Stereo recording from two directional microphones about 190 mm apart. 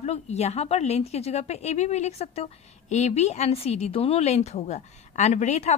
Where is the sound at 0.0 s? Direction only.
35° left (ahead or behind).